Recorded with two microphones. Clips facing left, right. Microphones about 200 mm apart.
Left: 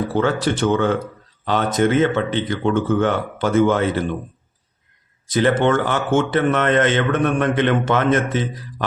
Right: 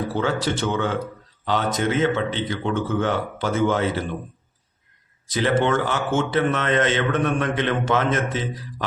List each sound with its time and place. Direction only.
0.2 s a man's voice: 55° left (ahead or behind)
5.3 s a man's voice: 55° left (ahead or behind)